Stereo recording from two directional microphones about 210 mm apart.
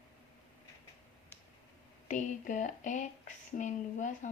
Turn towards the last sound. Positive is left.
turn(degrees=35)  # may be behind; listen again after turning